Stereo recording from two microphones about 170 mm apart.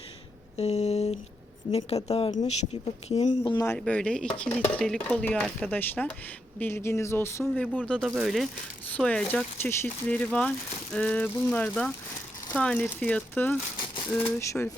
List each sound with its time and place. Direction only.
0.5 s a sound: 40° left (ahead or behind)
3.4 s speech: 25° left (ahead or behind)
3.8 s speech: 5° left (ahead or behind)